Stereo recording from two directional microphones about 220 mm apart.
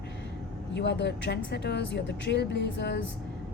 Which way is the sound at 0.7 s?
50° left (ahead or behind).